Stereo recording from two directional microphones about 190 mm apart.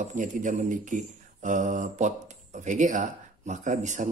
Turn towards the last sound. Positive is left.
turn(degrees=-40)  # may be behind; listen again after turning